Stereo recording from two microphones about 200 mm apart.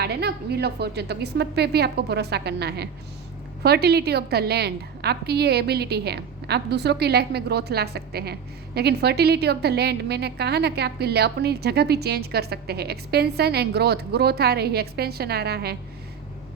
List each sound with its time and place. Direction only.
0.0 s a woman's voice: 55° right (ahead or behind)